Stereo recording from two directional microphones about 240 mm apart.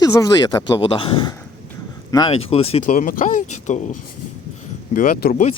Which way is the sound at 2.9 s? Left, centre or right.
Left.